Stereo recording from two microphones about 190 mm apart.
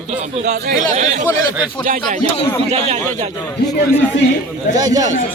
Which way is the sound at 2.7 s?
35° right (ahead or behind).